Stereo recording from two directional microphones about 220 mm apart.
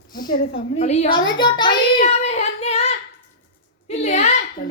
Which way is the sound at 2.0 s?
30° left (ahead or behind).